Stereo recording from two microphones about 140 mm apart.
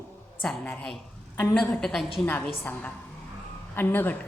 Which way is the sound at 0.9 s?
5° left (ahead or behind).